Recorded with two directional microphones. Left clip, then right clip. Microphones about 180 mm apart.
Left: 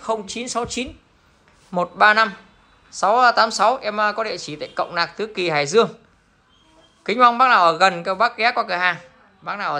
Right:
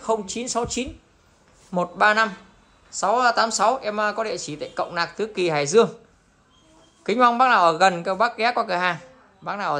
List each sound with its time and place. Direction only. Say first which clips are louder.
0.0 s speech: even; 20° right (ahead or behind)
7.0 s speech: left 3 dB; 15° right (ahead or behind)